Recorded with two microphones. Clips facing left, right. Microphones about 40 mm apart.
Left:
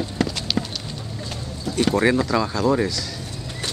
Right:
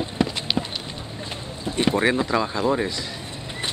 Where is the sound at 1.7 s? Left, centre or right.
Right.